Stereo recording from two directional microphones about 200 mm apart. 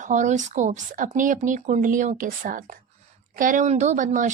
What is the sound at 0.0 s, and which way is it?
A woman's voice, 40° right (ahead or behind).